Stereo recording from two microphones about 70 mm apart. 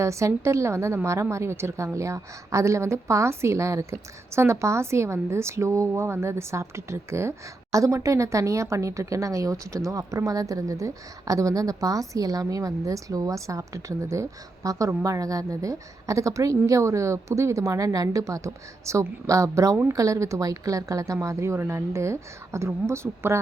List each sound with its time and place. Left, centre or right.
0.0 s a woman's voice: right
5.9 s a woman's voice: right